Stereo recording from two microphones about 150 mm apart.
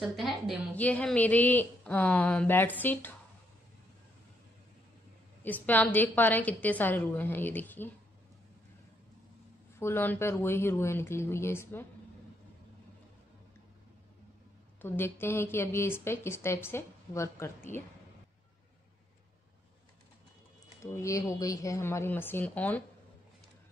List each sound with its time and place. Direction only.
0.0 s a woman's voice: centre (ahead or behind)
0.7 s a woman's voice: 10° left (ahead or behind)
5.4 s a woman's voice: 10° left (ahead or behind)
9.8 s a woman's voice: 15° left (ahead or behind)
14.8 s a woman's voice: 15° left (ahead or behind)
20.8 s a woman's voice: 20° left (ahead or behind)